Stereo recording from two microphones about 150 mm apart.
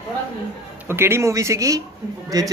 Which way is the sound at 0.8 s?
15° right (ahead or behind).